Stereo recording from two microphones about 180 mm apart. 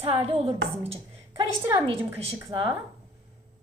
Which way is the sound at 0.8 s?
30° right (ahead or behind).